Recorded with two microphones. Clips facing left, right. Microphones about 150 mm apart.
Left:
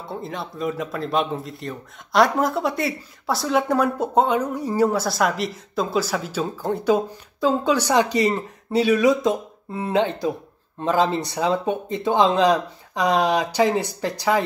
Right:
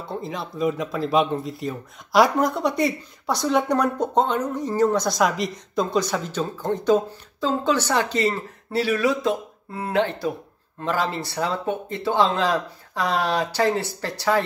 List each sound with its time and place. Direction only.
0.0 s speech: centre (ahead or behind)